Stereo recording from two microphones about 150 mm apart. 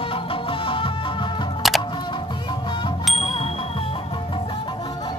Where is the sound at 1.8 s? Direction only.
30° left (ahead or behind).